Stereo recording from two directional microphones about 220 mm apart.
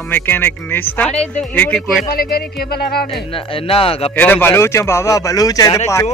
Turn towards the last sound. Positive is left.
turn(degrees=15)  # may be behind; listen again after turning